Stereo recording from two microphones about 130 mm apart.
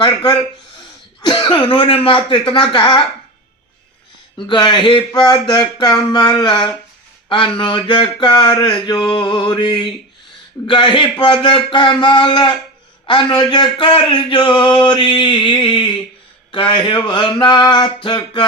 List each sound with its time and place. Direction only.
1.2 s a man's voice: 35° left (ahead or behind)
4.4 s a man's voice: 35° left (ahead or behind)